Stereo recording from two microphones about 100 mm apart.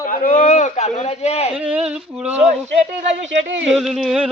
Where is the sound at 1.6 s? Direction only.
10° right (ahead or behind).